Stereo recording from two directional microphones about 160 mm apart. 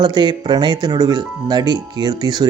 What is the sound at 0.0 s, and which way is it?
Speech, 25° right (ahead or behind).